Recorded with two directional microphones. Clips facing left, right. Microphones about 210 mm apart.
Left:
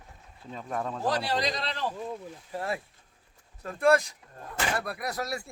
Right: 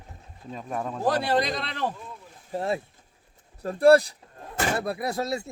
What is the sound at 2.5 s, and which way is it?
Speech, 25° right (ahead or behind).